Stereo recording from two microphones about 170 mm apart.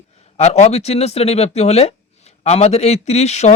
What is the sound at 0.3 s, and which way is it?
A man's voice, 40° left (ahead or behind).